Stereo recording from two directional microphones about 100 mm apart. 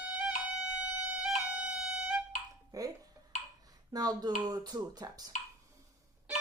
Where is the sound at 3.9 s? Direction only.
40° right (ahead or behind).